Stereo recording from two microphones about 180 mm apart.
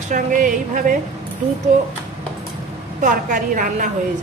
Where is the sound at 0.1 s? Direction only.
45° right (ahead or behind).